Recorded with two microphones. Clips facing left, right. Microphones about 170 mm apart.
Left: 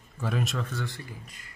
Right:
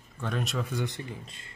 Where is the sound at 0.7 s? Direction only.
15° right (ahead or behind).